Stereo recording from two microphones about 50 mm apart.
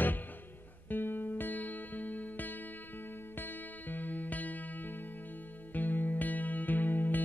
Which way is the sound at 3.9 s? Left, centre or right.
Left.